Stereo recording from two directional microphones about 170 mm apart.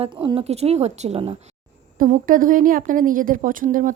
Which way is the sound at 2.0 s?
50° right (ahead or behind).